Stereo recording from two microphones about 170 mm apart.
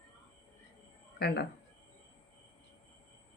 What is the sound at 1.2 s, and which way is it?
Speech, 70° left (ahead or behind).